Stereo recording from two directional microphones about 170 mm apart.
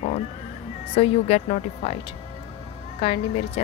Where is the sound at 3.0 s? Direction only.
35° left (ahead or behind).